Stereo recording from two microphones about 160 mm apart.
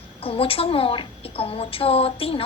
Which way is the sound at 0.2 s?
35° left (ahead or behind).